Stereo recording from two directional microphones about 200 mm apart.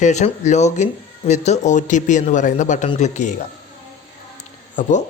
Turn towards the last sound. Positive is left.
turn(degrees=35)  # may be behind; listen again after turning